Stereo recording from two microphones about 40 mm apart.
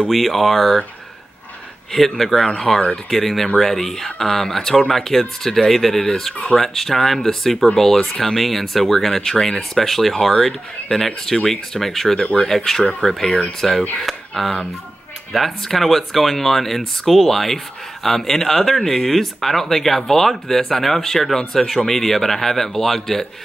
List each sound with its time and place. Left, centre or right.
0.1 s speech: centre
1.9 s speech: centre